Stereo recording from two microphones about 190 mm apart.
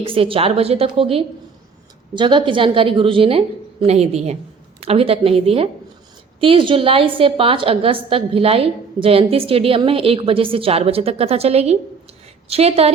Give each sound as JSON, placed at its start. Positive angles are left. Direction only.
{"t": 0.0, "sound": "a woman's voice", "side_deg": -30}